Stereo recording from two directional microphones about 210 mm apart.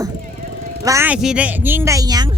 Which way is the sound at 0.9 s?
10° right (ahead or behind).